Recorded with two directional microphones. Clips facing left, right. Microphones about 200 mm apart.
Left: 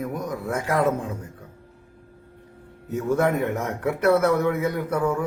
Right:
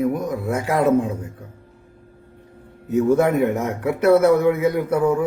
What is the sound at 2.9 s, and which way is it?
A man's voice, 10° right (ahead or behind).